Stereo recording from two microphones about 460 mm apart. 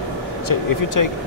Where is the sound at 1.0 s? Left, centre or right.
Left.